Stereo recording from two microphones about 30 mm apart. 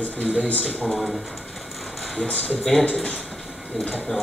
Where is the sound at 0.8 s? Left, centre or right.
Centre.